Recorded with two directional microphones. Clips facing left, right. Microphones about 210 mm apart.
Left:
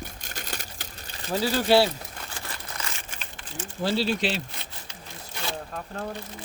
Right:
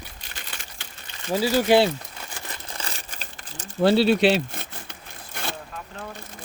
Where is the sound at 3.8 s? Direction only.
65° right (ahead or behind).